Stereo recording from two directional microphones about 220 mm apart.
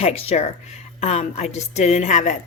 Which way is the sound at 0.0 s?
25° left (ahead or behind).